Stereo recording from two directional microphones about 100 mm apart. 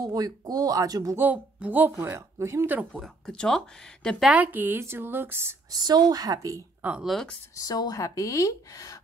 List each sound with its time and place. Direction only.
0.0 s speech: 40° right (ahead or behind)
1.1 s speech: 15° right (ahead or behind)
2.0 s a woman's voice: 30° right (ahead or behind)
3.0 s speech: 5° left (ahead or behind)
4.3 s a woman's voice: 15° right (ahead or behind)
5.7 s speech: 45° right (ahead or behind)
6.8 s speech: 15° right (ahead or behind)
7.1 s speech: 5° left (ahead or behind)
7.5 s a woman's voice: 40° left (ahead or behind)